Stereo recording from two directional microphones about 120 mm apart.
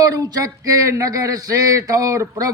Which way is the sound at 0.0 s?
30° right (ahead or behind).